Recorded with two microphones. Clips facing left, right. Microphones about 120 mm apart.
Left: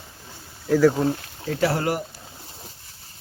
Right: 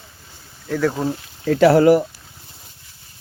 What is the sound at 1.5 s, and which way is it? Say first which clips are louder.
Speech: right 9 dB; 90° right.